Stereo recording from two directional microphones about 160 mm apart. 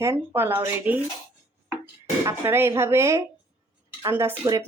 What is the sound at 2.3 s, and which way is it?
Speech, 15° right (ahead or behind).